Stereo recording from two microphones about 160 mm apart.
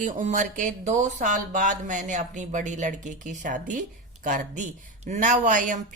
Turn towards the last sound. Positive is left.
turn(degrees=-55)  # may be behind; listen again after turning